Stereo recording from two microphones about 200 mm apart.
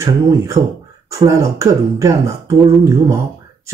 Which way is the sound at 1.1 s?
15° right (ahead or behind).